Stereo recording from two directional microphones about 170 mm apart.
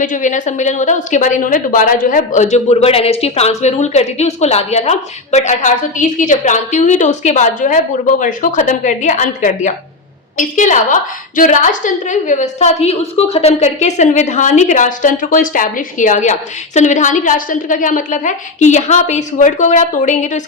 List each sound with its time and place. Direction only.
0.0 s a woman's voice: 50° left (ahead or behind)